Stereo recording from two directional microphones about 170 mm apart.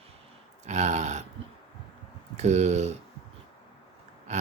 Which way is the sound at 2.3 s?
40° right (ahead or behind).